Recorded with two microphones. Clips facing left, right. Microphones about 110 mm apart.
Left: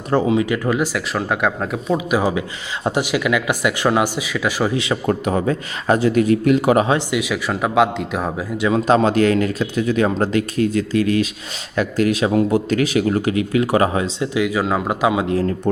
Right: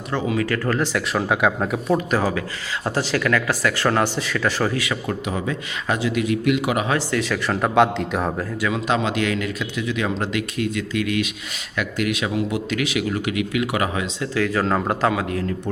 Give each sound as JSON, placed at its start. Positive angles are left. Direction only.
{"t": 0.3, "sound": "speech", "side_deg": 15}
{"t": 1.1, "sound": "speech", "side_deg": 0}
{"t": 2.0, "sound": "speech", "side_deg": 15}
{"t": 5.0, "sound": "speech", "side_deg": 45}
{"t": 7.1, "sound": "speech", "side_deg": 10}
{"t": 8.7, "sound": "speech", "side_deg": 40}
{"t": 14.2, "sound": "speech", "side_deg": 15}
{"t": 15.1, "sound": "a man's voice", "side_deg": 20}